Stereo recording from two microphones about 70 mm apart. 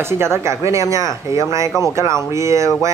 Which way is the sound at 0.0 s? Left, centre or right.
Right.